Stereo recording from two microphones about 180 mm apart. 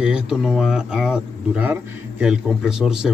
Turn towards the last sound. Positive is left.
turn(degrees=-5)  # may be behind; listen again after turning